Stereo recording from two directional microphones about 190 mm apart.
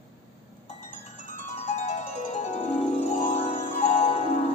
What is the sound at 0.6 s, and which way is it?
Music, 40° left (ahead or behind).